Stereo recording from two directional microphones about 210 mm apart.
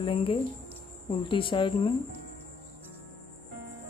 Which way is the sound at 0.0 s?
25° left (ahead or behind).